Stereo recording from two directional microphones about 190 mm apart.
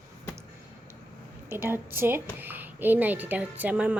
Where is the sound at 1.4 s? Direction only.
10° right (ahead or behind).